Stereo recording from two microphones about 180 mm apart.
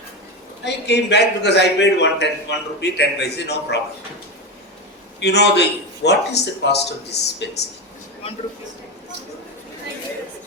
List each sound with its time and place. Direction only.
0.6 s a man's voice: 70° left (ahead or behind)
5.2 s a man's voice: 70° left (ahead or behind)